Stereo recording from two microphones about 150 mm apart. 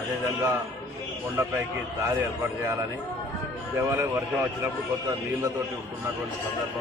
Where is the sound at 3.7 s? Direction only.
20° right (ahead or behind).